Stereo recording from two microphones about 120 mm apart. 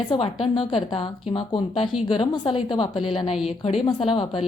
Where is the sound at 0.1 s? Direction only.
50° left (ahead or behind).